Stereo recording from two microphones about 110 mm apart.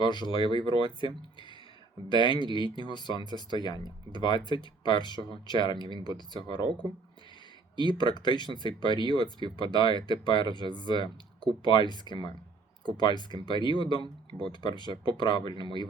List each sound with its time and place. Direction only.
0.0 s speech: 45° left (ahead or behind)
7.8 s speech: 45° left (ahead or behind)